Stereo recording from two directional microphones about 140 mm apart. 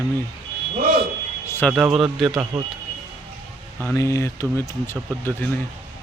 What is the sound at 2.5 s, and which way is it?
Speech, 55° right (ahead or behind).